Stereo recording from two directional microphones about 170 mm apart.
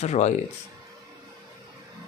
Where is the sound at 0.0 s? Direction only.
40° left (ahead or behind).